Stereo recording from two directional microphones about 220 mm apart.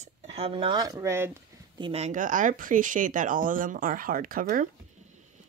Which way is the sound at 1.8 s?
30° right (ahead or behind).